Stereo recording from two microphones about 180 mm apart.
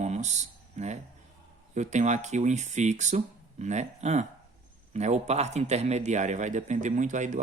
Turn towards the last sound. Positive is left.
turn(degrees=-45)  # may be behind; listen again after turning